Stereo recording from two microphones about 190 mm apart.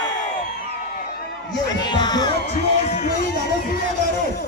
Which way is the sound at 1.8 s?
20° left (ahead or behind).